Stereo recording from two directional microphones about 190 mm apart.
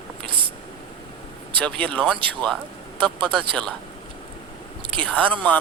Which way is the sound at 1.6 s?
5° left (ahead or behind).